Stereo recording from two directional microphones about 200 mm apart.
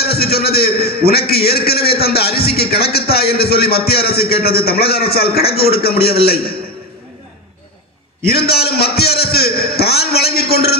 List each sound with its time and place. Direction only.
0.0 s a man's voice: 50° left (ahead or behind)
8.3 s a man's voice: 50° left (ahead or behind)